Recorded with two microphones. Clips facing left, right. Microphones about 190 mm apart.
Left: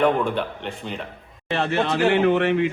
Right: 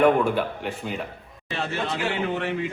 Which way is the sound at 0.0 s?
5° right (ahead or behind).